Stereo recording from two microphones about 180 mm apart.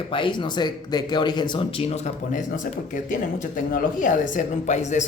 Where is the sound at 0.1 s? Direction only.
25° left (ahead or behind).